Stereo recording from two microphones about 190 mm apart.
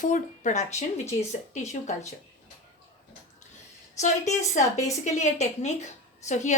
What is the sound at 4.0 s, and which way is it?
A woman's voice, 40° left (ahead or behind).